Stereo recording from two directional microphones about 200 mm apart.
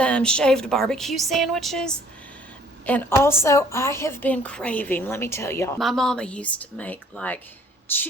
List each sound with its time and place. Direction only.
0.0 s a woman's voice: 5° left (ahead or behind)
5.8 s a woman's voice: centre (ahead or behind)